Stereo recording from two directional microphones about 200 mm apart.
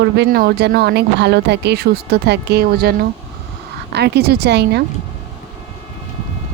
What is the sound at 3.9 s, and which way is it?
Speech, 55° right (ahead or behind).